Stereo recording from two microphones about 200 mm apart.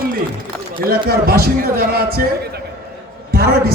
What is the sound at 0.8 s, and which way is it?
A man's voice, 50° right (ahead or behind).